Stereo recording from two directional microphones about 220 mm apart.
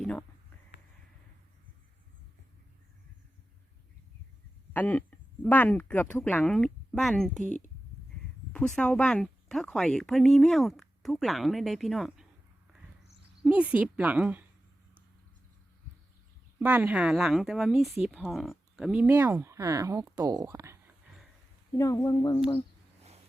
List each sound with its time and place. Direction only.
0.0 s a sound: 5° left (ahead or behind)
4.7 s speech: 10° left (ahead or behind)
7.4 s speech: 35° right (ahead or behind)
8.5 s speech: 5° left (ahead or behind)
13.4 s speech: 5° right (ahead or behind)
16.6 s speech: 10° right (ahead or behind)
21.7 s speech: 15° left (ahead or behind)